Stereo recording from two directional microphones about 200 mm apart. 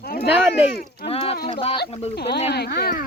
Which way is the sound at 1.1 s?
30° left (ahead or behind).